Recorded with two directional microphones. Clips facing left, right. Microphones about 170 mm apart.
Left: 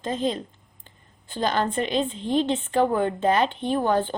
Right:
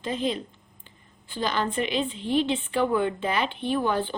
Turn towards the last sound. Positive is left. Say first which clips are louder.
# left 3 dB
turn(degrees=40)  # may be behind; listen again after turning